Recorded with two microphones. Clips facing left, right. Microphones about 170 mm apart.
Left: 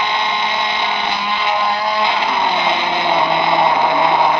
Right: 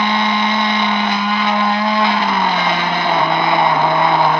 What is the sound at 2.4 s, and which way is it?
Music, 20° left (ahead or behind).